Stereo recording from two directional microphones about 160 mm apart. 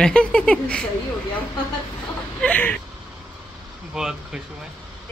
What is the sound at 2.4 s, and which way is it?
Speech, 10° left (ahead or behind).